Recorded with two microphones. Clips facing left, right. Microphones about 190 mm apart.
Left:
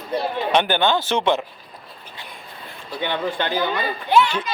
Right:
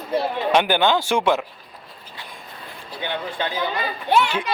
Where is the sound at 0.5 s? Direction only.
10° right (ahead or behind).